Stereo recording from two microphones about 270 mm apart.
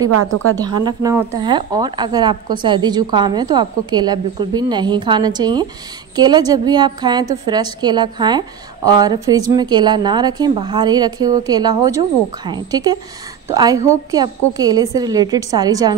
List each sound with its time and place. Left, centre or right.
0.1 s a woman's voice: right
0.6 s a woman's voice: centre